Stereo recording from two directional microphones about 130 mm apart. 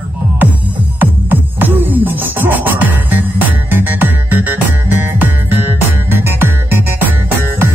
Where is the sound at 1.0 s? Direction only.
15° right (ahead or behind).